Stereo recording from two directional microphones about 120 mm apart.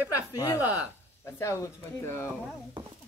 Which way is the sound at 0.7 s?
25° left (ahead or behind).